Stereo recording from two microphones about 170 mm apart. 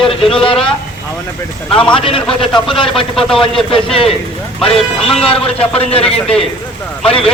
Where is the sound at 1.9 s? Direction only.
30° left (ahead or behind).